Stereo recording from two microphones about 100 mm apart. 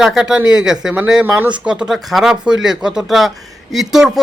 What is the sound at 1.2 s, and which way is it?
Speech, 20° right (ahead or behind).